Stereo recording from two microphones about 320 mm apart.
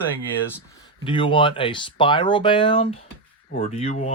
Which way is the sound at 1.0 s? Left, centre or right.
Centre.